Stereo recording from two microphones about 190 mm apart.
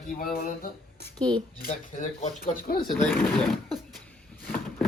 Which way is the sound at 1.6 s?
45° left (ahead or behind).